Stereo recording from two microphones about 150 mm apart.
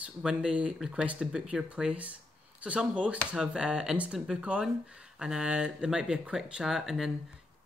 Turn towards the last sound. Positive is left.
turn(degrees=0)  # may be behind; listen again after turning